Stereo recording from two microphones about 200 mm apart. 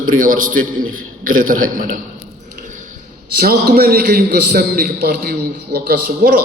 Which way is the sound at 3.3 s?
50° right (ahead or behind).